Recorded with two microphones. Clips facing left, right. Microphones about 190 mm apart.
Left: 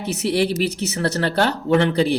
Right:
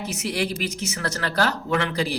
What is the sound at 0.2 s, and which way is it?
Speech, 30° left (ahead or behind).